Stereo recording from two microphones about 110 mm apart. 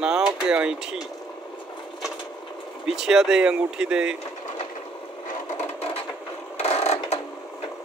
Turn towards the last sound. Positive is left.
turn(degrees=75)  # may be behind; listen again after turning